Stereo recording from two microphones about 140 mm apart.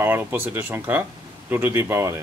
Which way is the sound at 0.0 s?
15° right (ahead or behind).